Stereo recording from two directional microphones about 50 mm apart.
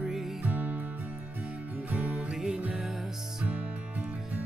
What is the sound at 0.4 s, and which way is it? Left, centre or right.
Music, right.